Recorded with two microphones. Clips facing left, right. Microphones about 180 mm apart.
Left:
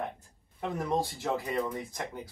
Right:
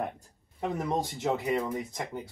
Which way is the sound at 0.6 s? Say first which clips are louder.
Right 1 dB; 20° right (ahead or behind).